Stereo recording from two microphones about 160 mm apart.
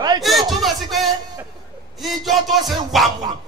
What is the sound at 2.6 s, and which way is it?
Speech, 30° right (ahead or behind).